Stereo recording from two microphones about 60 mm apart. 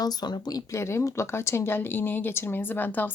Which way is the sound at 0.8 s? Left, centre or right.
Left.